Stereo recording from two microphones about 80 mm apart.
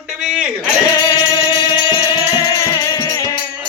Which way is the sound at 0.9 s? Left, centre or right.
Left.